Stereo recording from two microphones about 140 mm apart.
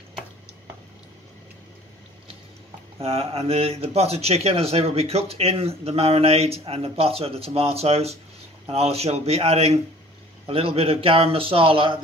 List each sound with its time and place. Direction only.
3.0 s speech: 45° right (ahead or behind)